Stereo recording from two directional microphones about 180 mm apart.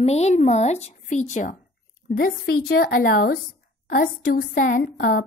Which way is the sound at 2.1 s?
55° left (ahead or behind).